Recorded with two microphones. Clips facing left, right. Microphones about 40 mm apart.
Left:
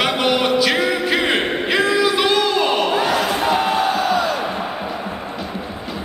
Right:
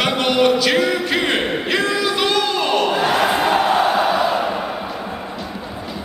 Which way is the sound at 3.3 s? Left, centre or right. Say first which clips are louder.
Right 2 dB; right.